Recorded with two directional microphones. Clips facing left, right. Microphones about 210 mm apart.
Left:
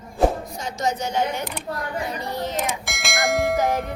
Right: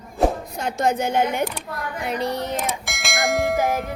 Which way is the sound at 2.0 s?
70° right (ahead or behind).